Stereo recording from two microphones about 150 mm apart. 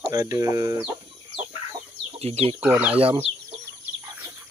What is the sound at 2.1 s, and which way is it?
Speech, 45° right (ahead or behind).